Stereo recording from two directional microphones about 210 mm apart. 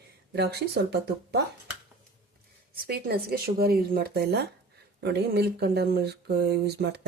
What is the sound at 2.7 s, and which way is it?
Speech, 45° right (ahead or behind).